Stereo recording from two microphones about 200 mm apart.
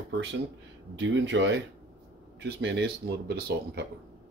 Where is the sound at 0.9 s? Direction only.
65° right (ahead or behind).